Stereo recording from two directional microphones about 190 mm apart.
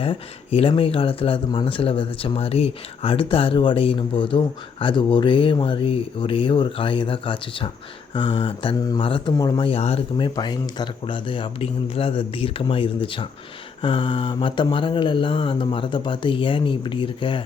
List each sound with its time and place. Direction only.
0.0 s speech: 30° left (ahead or behind)